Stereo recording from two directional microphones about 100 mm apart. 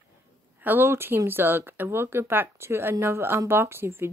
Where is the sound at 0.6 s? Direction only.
20° right (ahead or behind).